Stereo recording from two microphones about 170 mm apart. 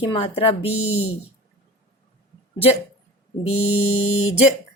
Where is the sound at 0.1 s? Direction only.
35° left (ahead or behind).